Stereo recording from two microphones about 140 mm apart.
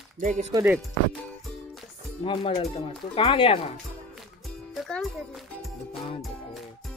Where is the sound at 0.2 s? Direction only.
60° right (ahead or behind).